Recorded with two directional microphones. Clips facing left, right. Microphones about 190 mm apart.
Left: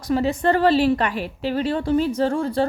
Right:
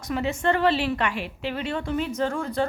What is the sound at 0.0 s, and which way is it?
A woman's voice, 35° left (ahead or behind).